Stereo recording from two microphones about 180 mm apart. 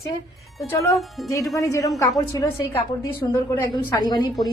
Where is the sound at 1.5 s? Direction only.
20° left (ahead or behind).